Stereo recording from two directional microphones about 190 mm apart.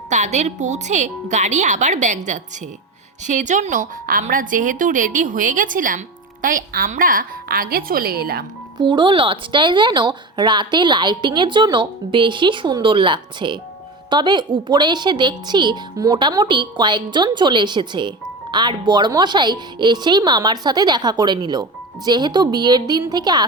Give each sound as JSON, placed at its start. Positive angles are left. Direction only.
{"t": 0.1, "sound": "a woman's voice", "side_deg": -35}
{"t": 8.8, "sound": "speech", "side_deg": -25}